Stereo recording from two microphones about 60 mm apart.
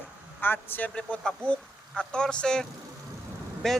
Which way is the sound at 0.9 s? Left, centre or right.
Centre.